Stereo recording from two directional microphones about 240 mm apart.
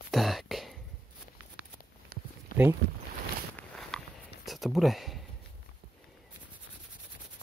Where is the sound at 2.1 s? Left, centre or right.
Right.